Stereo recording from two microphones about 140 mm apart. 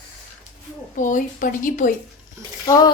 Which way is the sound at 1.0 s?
65° left (ahead or behind).